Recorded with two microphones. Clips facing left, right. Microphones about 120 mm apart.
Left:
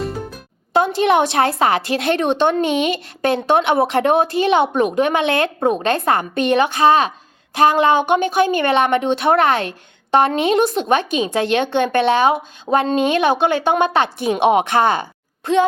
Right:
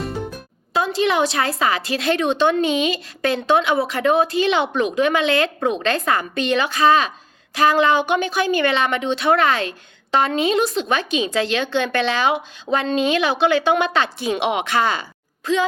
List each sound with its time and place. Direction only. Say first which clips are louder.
0.0 s music: left 1 dB; centre (ahead or behind)
0.7 s a woman's voice: left 4 dB; 55° left (ahead or behind)
14.6 s speech: left 4 dB; 20° left (ahead or behind)